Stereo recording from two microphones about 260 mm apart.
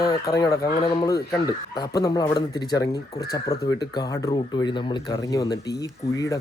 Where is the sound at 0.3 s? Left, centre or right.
Centre.